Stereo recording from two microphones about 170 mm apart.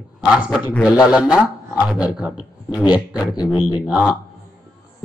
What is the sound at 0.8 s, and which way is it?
Speech, 5° right (ahead or behind).